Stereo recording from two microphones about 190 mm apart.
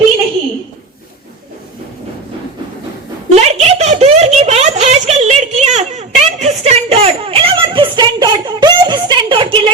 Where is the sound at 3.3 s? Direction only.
35° right (ahead or behind).